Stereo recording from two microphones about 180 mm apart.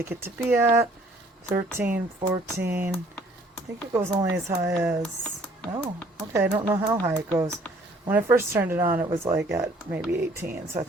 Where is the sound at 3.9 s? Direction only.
15° right (ahead or behind).